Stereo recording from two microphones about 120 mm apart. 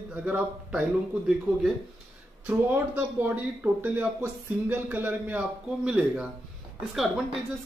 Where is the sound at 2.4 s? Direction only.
15° right (ahead or behind).